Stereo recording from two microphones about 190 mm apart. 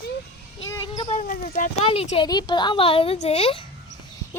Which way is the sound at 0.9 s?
35° left (ahead or behind).